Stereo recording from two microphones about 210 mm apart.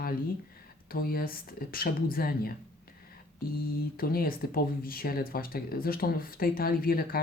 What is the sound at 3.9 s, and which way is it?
Speech, 45° left (ahead or behind).